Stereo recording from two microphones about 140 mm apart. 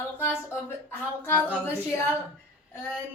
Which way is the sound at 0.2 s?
15° left (ahead or behind).